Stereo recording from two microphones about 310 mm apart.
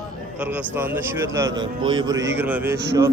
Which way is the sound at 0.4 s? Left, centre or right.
Centre.